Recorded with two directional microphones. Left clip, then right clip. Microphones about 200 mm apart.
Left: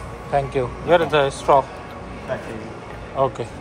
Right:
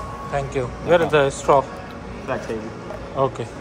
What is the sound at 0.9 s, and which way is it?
Speech, 10° right (ahead or behind).